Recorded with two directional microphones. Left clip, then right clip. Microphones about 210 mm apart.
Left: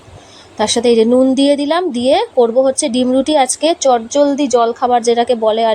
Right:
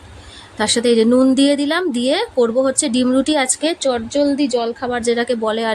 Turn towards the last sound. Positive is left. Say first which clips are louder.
# left 6 dB
turn(degrees=-5)  # may be behind; listen again after turning